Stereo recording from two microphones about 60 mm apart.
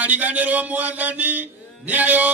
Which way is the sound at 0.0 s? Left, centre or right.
Right.